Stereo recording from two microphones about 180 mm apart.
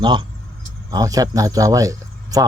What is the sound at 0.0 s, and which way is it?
Speech, 25° right (ahead or behind).